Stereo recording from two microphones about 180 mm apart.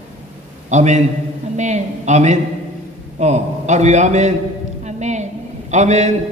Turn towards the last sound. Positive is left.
turn(degrees=-40)  # may be behind; listen again after turning